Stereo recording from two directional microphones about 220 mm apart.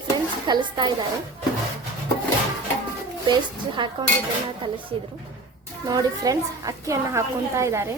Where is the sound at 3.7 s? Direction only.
20° right (ahead or behind).